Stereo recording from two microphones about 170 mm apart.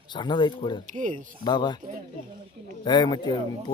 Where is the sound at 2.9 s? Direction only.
25° left (ahead or behind).